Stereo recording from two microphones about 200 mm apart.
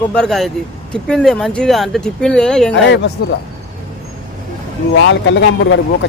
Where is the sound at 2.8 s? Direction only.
60° left (ahead or behind).